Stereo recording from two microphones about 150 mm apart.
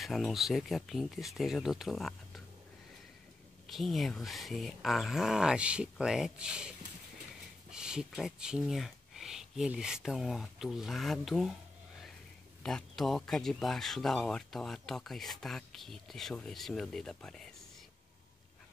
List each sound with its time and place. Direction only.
0.0 s speech: centre (ahead or behind)
3.6 s speech: centre (ahead or behind)
7.7 s speech: 5° right (ahead or behind)
12.6 s speech: centre (ahead or behind)